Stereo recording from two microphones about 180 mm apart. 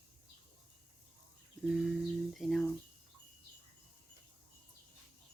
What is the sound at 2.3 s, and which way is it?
Speech, centre (ahead or behind).